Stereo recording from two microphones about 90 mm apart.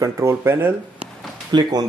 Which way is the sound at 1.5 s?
60° right (ahead or behind).